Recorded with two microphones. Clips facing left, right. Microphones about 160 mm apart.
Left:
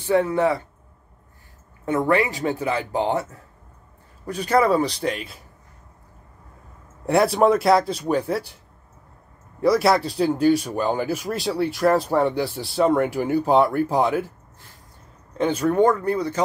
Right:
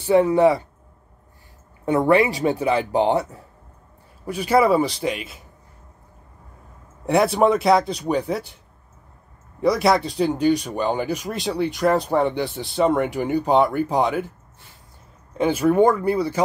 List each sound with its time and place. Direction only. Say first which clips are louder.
0.0 s speech: right 4 dB; 15° right (ahead or behind)
2.0 s speech: right 4 dB; 15° right (ahead or behind)
4.3 s speech: right 2 dB; 5° right (ahead or behind)
7.1 s speech: even; centre (ahead or behind)
9.6 s speech: even; centre (ahead or behind)
15.3 s speech: right 2 dB; 10° right (ahead or behind)